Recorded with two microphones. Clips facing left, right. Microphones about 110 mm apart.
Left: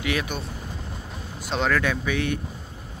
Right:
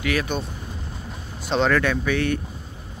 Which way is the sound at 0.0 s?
20° left (ahead or behind).